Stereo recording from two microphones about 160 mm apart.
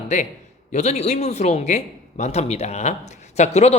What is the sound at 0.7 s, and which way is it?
A man's voice, 45° left (ahead or behind).